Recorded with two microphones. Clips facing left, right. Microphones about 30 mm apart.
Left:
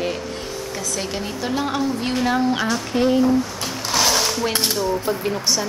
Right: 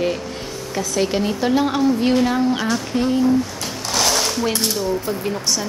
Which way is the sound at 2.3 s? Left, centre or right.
Centre.